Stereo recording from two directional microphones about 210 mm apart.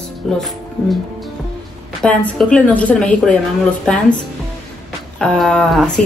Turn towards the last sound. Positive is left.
turn(degrees=5)  # may be behind; listen again after turning